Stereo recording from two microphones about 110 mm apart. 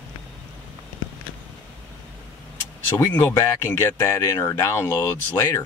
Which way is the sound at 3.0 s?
20° left (ahead or behind).